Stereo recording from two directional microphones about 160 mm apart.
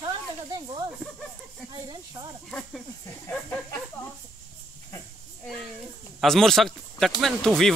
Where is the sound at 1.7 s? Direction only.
25° right (ahead or behind).